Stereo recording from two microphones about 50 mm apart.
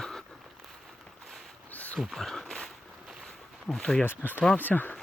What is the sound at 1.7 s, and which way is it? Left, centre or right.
Pig, left.